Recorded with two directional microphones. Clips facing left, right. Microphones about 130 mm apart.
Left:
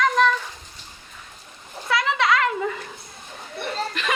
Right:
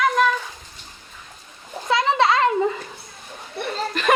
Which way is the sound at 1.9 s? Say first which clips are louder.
Right 3 dB; 30° right (ahead or behind).